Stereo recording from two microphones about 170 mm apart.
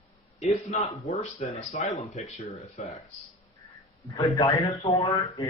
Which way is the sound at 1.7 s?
40° left (ahead or behind).